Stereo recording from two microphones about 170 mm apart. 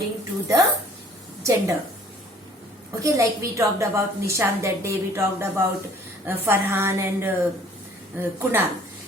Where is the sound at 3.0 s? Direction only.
20° right (ahead or behind).